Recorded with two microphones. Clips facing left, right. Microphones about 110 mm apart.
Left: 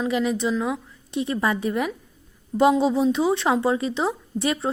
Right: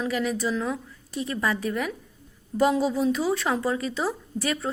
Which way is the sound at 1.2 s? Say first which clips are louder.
Left 3 dB; 30° left (ahead or behind).